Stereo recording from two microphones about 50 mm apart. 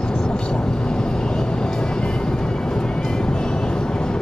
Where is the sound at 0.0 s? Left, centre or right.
Centre.